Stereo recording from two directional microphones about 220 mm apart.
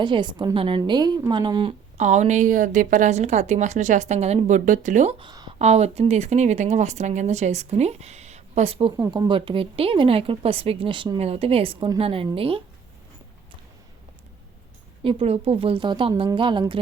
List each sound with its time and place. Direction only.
0.0 s speech: 20° right (ahead or behind)
2.0 s a woman's voice: 35° right (ahead or behind)
5.2 s a sound: 20° right (ahead or behind)
5.5 s speech: 30° right (ahead or behind)
15.0 s speech: 25° right (ahead or behind)